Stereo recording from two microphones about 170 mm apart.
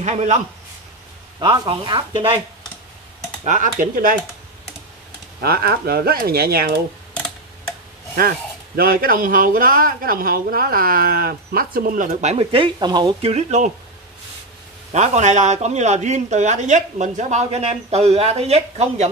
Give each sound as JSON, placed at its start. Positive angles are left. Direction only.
{"t": 0.0, "sound": "a man's voice", "side_deg": -40}
{"t": 1.4, "sound": "speech", "side_deg": -30}
{"t": 3.4, "sound": "a man's voice", "side_deg": -50}
{"t": 5.4, "sound": "speech", "side_deg": -65}
{"t": 8.2, "sound": "speech", "side_deg": -60}
{"t": 13.3, "sound": "speech", "side_deg": -40}
{"t": 14.9, "sound": "a man's voice", "side_deg": -40}